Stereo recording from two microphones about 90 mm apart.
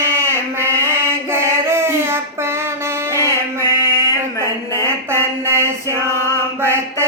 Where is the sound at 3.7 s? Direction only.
45° left (ahead or behind).